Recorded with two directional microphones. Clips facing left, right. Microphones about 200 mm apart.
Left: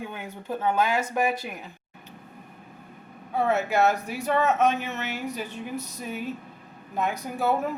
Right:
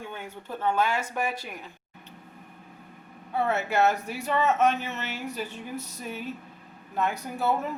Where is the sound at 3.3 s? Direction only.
15° left (ahead or behind).